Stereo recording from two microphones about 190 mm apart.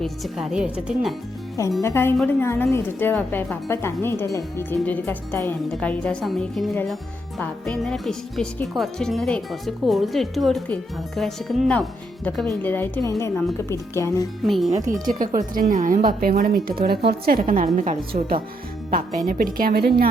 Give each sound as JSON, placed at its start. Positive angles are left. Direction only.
{"t": 0.0, "sound": "speech", "side_deg": 0}
{"t": 1.8, "sound": "speech", "side_deg": 15}
{"t": 14.4, "sound": "speech", "side_deg": 0}
{"t": 15.0, "sound": "a woman's voice", "side_deg": -45}
{"t": 18.9, "sound": "a woman's voice", "side_deg": -45}